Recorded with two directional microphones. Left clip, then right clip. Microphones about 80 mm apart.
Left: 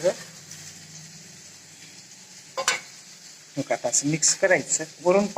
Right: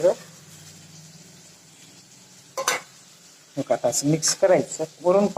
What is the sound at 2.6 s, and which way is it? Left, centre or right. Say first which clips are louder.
Stir: right 1 dB; right.